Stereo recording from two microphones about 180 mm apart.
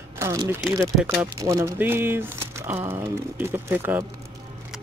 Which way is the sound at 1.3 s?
15° right (ahead or behind).